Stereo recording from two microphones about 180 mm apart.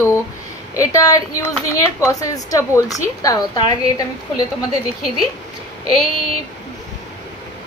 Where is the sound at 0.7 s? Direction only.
20° left (ahead or behind).